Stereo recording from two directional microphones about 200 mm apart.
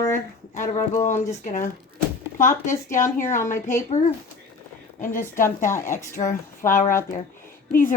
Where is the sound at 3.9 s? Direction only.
35° left (ahead or behind).